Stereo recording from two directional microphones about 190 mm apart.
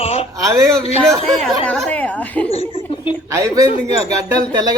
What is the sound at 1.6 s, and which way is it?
Speech, 5° left (ahead or behind).